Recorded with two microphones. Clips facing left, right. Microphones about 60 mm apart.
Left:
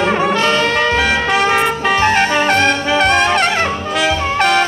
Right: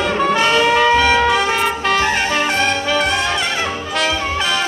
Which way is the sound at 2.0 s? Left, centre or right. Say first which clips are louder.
Left 4 dB; left.